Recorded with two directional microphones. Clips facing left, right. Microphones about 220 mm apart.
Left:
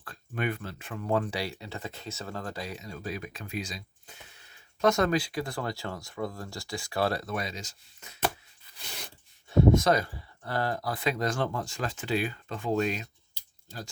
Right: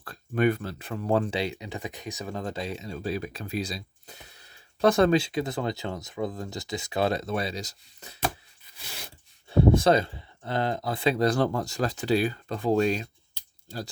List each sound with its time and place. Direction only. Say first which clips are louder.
0.0 s speech: right 8 dB; 40° right (ahead or behind)
9.5 s speech: right 2 dB; 30° right (ahead or behind)